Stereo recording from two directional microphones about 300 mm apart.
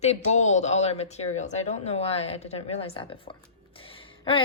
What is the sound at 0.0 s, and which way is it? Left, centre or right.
A man's voice, left.